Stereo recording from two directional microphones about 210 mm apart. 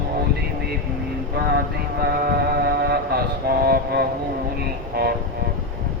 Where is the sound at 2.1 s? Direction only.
50° right (ahead or behind).